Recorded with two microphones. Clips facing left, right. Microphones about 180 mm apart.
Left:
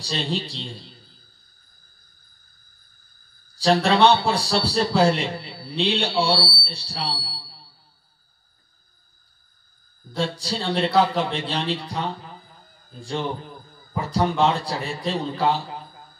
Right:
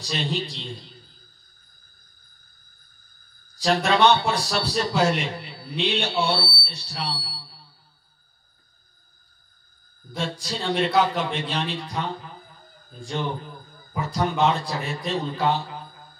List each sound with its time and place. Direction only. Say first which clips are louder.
0.0 s a man's voice: left 1 dB; 30° left (ahead or behind)
3.6 s a man's voice: left 2 dB; 30° left (ahead or behind)
10.4 s a man's voice: right 2 dB; 30° left (ahead or behind)
14.1 s a man's voice: left 2 dB; 30° left (ahead or behind)